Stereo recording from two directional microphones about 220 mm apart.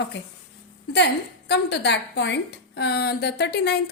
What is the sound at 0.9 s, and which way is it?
A woman's voice, 50° left (ahead or behind).